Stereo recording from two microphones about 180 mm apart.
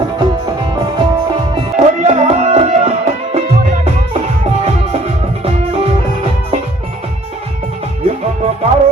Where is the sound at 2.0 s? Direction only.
35° right (ahead or behind).